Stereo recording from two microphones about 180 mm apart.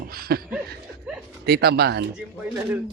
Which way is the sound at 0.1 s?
55° right (ahead or behind).